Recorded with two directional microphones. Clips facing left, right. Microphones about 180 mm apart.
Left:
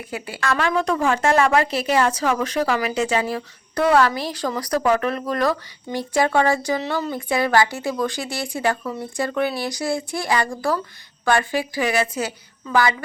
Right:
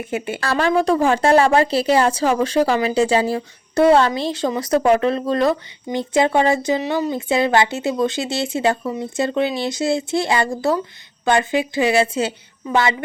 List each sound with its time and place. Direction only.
0.0 s a woman's voice: 25° right (ahead or behind)